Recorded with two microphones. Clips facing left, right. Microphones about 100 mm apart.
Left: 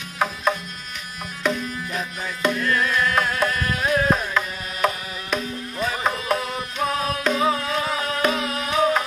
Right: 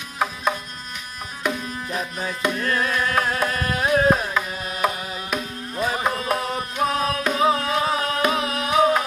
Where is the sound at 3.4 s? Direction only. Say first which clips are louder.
Even; 20° right (ahead or behind).